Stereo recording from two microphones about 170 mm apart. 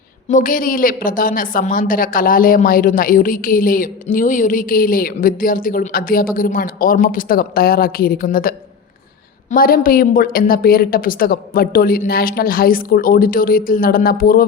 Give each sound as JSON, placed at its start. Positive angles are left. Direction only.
{"t": 0.3, "sound": "a woman's voice", "side_deg": 50}